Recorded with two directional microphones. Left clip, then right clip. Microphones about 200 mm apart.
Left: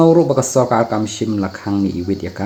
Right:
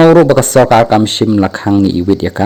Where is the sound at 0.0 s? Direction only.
40° right (ahead or behind).